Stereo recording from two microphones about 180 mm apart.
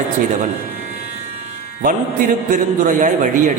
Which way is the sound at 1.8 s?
50° right (ahead or behind).